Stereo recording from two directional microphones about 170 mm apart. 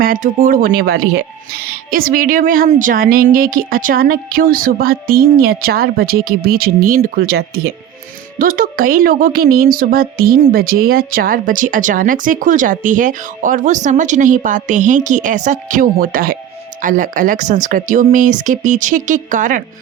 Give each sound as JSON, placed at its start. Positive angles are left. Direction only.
{"t": 0.0, "sound": "a woman's voice", "side_deg": -55}